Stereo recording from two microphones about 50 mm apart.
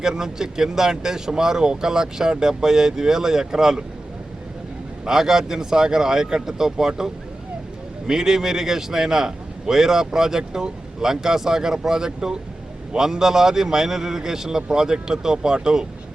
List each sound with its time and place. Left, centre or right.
0.0 s a man's voice: centre
5.0 s a man's voice: centre